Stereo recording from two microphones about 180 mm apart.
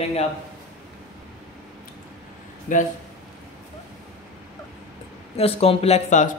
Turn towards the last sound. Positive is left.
turn(degrees=40)  # may be behind; listen again after turning